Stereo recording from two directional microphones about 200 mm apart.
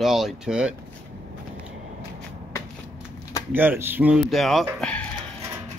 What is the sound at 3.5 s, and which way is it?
Speech, 10° right (ahead or behind).